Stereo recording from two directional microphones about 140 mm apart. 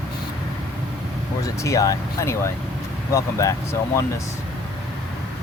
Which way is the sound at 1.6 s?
25° left (ahead or behind).